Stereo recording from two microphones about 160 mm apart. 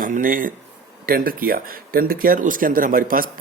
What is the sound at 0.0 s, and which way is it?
Speech, 60° right (ahead or behind).